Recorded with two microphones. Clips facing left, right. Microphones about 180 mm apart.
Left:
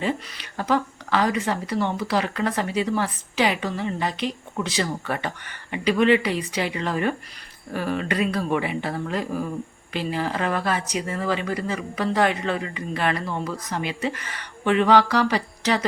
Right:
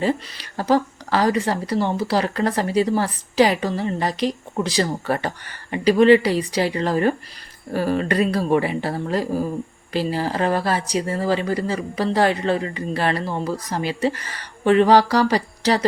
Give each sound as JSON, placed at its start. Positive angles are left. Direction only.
{"t": 0.0, "sound": "speech", "side_deg": -35}